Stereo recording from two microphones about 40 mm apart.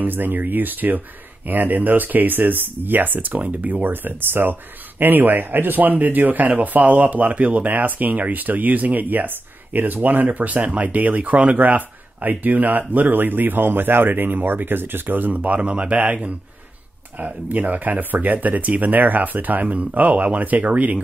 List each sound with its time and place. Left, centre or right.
0.0 s speech: right
3.8 s speech: right
17.2 s speech: right